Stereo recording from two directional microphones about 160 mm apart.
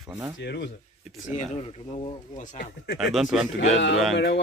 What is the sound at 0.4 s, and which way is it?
Speech, 90° left.